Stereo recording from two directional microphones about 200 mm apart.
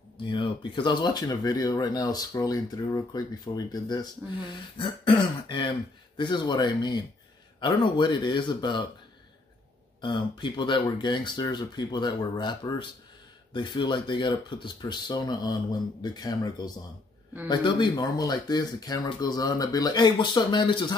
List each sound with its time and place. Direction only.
0.2 s speech: 25° left (ahead or behind)
10.0 s speech: 25° left (ahead or behind)